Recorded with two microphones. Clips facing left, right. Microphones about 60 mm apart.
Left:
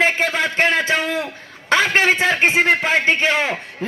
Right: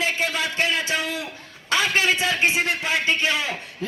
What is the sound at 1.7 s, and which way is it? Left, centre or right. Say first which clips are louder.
A man's voice: left 5 dB; left.